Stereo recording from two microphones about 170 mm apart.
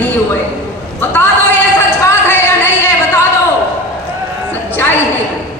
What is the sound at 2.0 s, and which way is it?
Singing, 15° left (ahead or behind).